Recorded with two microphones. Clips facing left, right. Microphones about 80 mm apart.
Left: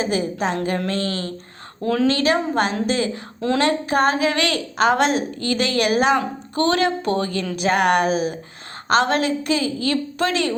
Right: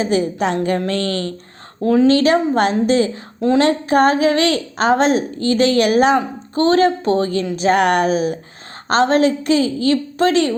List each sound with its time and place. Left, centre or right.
0.0 s a woman's voice: right
1.0 s speech: left
2.0 s a woman's voice: right
6.1 s a woman's voice: right